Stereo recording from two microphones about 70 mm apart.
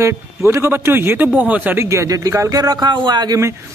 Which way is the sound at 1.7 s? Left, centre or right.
Right.